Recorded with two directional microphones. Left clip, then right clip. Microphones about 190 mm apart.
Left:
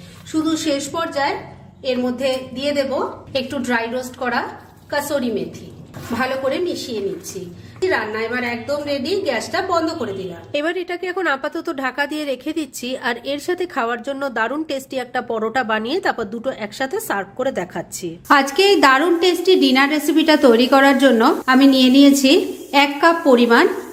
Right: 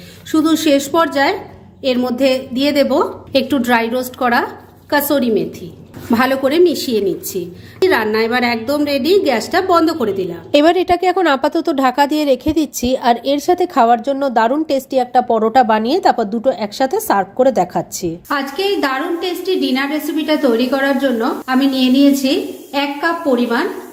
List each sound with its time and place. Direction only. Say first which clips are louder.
0.4 s a woman's voice: right 7 dB; 55° right (ahead or behind)
6.1 s a woman's voice: right 5 dB; 60° right (ahead or behind)
7.9 s a woman's voice: right 6 dB; 50° right (ahead or behind)
10.5 s speech: right 11 dB; 35° right (ahead or behind); by 18.1 s 15° right (ahead or behind)
18.3 s a woman's voice: left 5 dB; 35° left (ahead or behind)